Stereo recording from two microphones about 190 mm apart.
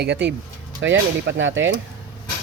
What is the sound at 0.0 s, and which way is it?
A man's voice, 65° right (ahead or behind).